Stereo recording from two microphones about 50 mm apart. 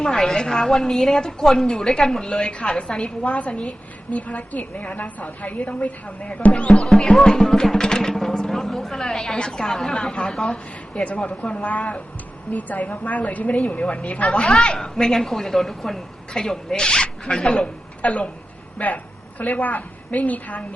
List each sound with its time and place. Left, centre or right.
0.0 s music: centre
3.2 s a woman's voice: left
6.7 s music: centre
10.9 s a woman's voice: left
14.8 s music: centre
18.0 s a woman's voice: left